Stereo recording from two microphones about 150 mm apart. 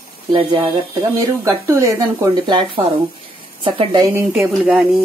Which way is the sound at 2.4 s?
30° right (ahead or behind).